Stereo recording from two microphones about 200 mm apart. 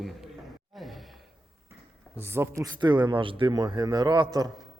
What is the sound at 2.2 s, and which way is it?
A man's voice, 10° right (ahead or behind).